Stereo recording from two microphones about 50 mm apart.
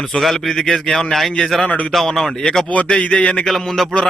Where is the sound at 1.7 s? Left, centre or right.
Left.